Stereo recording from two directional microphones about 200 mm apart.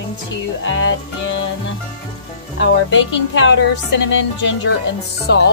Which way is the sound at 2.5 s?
65° left (ahead or behind).